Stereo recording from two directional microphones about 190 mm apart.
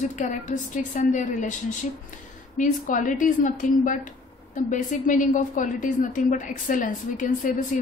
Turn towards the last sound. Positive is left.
turn(degrees=40)  # may be behind; listen again after turning